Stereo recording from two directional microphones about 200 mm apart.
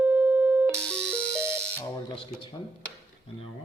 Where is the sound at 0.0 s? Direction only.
10° right (ahead or behind).